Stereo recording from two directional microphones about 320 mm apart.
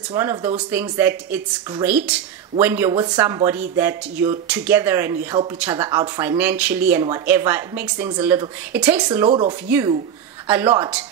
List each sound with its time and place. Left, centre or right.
0.1 s speech: centre
9.3 s speech: centre
9.7 s speech: centre